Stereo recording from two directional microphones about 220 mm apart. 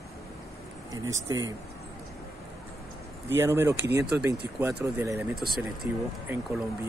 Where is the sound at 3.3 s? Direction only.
10° right (ahead or behind).